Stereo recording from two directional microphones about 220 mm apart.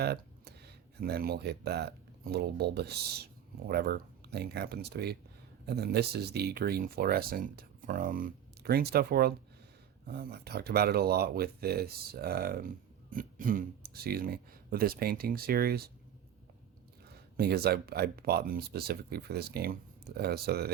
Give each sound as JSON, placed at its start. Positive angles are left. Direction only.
{"t": 0.0, "sound": "a sound", "side_deg": -45}
{"t": 0.9, "sound": "speech", "side_deg": -45}
{"t": 17.3, "sound": "speech", "side_deg": -45}